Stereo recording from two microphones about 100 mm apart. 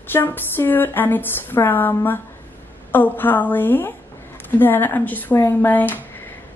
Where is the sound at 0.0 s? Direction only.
20° left (ahead or behind).